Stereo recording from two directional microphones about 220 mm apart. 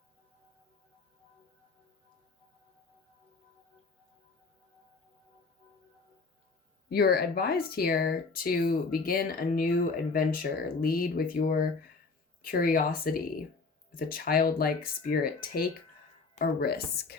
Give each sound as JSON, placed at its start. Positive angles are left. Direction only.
{"t": 6.9, "sound": "speech", "side_deg": 45}